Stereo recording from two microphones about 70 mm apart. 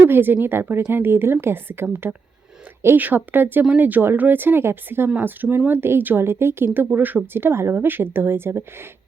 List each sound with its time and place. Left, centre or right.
0.0 s a woman's voice: right